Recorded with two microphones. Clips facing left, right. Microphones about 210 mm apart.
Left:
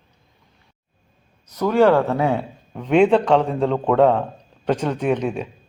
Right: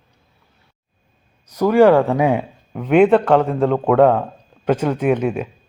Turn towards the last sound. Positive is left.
turn(degrees=-5)  # may be behind; listen again after turning